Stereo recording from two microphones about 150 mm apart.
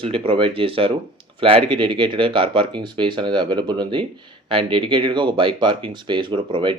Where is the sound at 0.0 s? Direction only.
40° right (ahead or behind).